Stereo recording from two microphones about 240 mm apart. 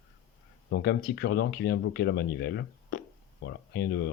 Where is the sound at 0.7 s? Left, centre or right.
Left.